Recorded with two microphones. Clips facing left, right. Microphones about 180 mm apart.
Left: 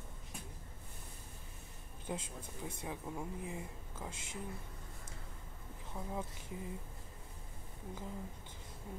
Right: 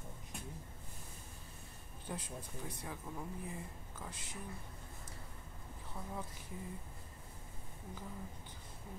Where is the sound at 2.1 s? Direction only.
20° left (ahead or behind).